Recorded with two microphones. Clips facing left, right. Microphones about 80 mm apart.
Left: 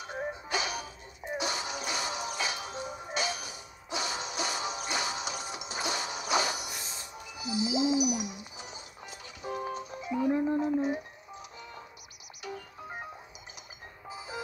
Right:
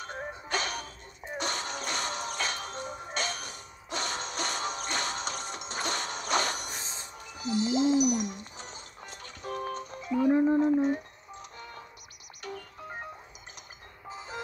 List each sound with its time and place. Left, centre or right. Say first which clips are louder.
0.0 s music: left 2 dB; centre
6.8 s music: right 1 dB; right
7.2 s music: right 3 dB; centre
10.3 s a sound: right 6 dB; centre
10.8 s music: right 3 dB; centre
14.0 s music: even; centre